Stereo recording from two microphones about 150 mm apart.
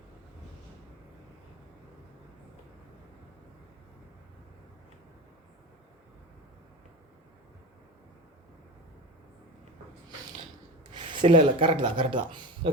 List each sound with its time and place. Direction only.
10.9 s speech: 35° right (ahead or behind)